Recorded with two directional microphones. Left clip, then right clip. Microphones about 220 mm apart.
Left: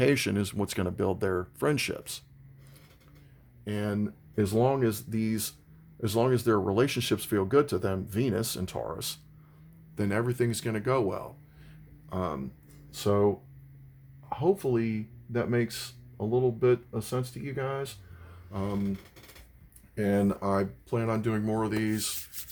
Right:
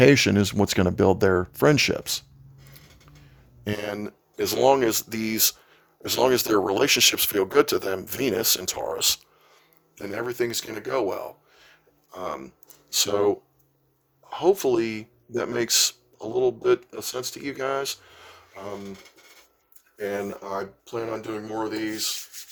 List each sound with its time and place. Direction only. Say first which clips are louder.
0.0 s speech: right 9 dB; 20° right (ahead or behind)
3.6 s speech: right 4 dB; 35° right (ahead or behind)
9.9 s speech: even; 25° right (ahead or behind)
12.9 s speech: right 4 dB; 50° right (ahead or behind)
20.0 s speech: left 1 dB; 25° right (ahead or behind)